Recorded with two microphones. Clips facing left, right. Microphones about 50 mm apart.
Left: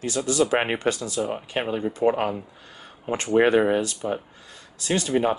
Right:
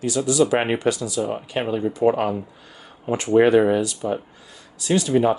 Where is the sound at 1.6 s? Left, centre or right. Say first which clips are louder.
Right 3 dB; left.